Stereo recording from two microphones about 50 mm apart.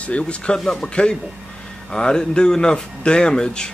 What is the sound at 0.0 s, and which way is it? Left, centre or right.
Speech, left.